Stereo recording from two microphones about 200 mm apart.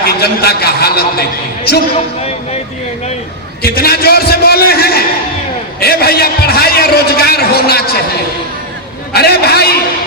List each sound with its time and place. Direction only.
0.0 s a man's voice: 50° left (ahead or behind)
3.6 s a man's voice: 50° left (ahead or behind)
9.1 s a man's voice: 50° left (ahead or behind)